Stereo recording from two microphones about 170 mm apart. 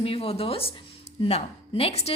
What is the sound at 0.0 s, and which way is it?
A woman's voice, 35° left (ahead or behind).